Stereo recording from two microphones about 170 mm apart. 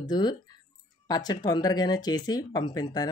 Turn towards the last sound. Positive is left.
turn(degrees=25)  # may be behind; listen again after turning